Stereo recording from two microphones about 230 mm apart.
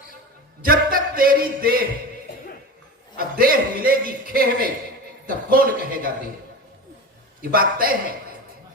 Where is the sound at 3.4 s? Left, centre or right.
Right.